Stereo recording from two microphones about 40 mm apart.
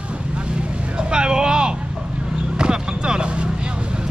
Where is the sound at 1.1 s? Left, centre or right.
Right.